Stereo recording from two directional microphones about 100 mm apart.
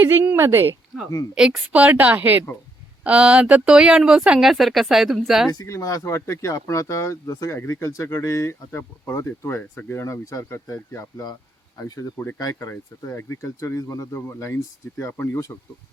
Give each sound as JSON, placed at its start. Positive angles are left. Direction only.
{"t": 0.0, "sound": "speech", "side_deg": -20}
{"t": 1.4, "sound": "a woman's voice", "side_deg": -5}
{"t": 5.5, "sound": "speech", "side_deg": 35}
{"t": 12.1, "sound": "speech", "side_deg": 20}
{"t": 12.4, "sound": "speech", "side_deg": 30}